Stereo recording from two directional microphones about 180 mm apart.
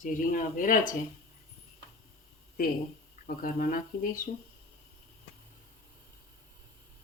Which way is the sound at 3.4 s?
50° left (ahead or behind).